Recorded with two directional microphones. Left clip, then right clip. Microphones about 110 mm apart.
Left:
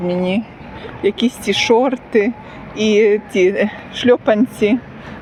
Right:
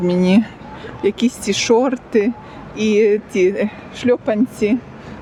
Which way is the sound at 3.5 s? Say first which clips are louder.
Left 4 dB; 15° right (ahead or behind).